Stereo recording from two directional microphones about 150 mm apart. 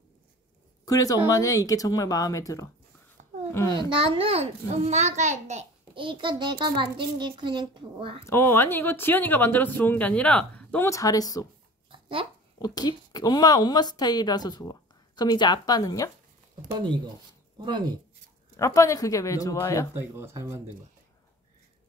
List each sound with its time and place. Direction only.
0.8 s a woman's voice: 25° left (ahead or behind)
3.2 s a sound: 50° right (ahead or behind)
3.5 s a woman's voice: 20° left (ahead or behind)
3.9 s a child's voice: 35° right (ahead or behind)
5.9 s a child's voice: 35° right (ahead or behind)
8.2 s speech: 20° left (ahead or behind)
10.9 s a woman's voice: 25° left (ahead or behind)
11.9 s a sound: 35° right (ahead or behind)
12.6 s a woman's voice: 25° left (ahead or behind)
17.6 s speech: 30° right (ahead or behind)
18.6 s a woman's voice: 20° left (ahead or behind)
19.9 s speech: 15° right (ahead or behind)